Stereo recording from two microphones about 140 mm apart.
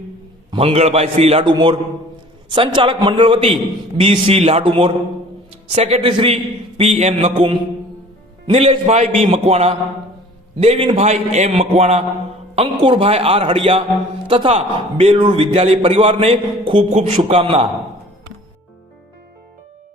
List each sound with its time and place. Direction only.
0.5 s a man's voice: 45° right (ahead or behind)